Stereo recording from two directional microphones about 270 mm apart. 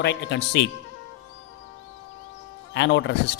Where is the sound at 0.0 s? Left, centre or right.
Left.